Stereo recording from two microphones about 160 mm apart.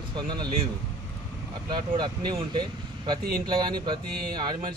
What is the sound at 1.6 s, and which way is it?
Speech, 25° right (ahead or behind).